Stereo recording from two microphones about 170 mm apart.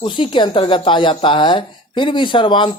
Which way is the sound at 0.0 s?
30° left (ahead or behind).